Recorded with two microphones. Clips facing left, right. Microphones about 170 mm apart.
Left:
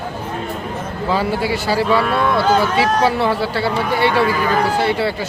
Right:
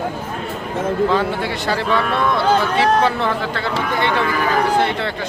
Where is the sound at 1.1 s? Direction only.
5° left (ahead or behind).